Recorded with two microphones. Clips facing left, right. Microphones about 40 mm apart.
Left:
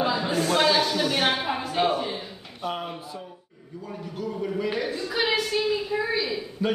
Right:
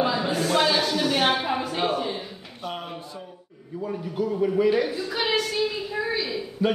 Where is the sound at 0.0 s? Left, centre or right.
Centre.